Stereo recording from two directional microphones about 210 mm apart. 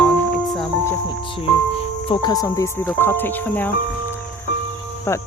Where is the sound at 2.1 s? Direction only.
20° left (ahead or behind).